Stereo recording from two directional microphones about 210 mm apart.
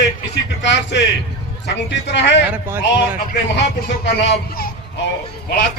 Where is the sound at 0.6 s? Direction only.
60° left (ahead or behind).